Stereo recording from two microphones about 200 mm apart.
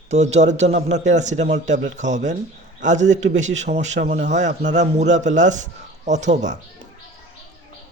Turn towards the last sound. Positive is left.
turn(degrees=-35)  # may be behind; listen again after turning